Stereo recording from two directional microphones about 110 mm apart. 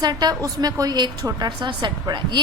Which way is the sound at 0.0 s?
40° right (ahead or behind).